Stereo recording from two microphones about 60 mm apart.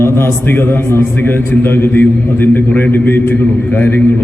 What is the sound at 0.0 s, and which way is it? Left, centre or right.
A man's voice, left.